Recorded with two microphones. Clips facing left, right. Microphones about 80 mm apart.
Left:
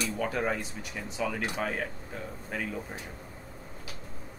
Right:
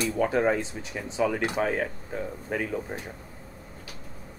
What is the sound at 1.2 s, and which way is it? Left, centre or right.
Speech, right.